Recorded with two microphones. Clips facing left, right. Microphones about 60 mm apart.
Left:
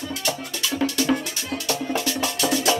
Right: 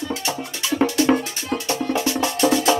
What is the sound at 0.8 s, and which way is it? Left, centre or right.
Music, right.